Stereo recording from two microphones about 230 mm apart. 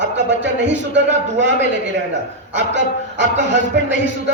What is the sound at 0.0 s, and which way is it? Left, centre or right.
A man's voice, right.